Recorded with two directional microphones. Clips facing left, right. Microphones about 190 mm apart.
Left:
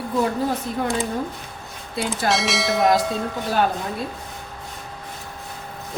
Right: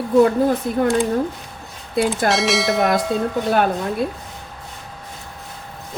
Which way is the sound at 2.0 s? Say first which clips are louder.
Right 2 dB; centre (ahead or behind).